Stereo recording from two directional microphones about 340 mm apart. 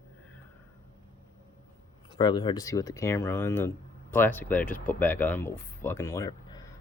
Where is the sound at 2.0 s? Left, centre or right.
Centre.